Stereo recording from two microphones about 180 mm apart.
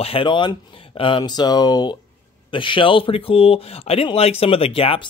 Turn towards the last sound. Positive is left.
turn(degrees=30)  # may be behind; listen again after turning